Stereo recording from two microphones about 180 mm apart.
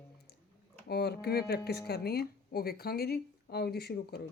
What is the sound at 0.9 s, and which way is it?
Speech, 65° left (ahead or behind).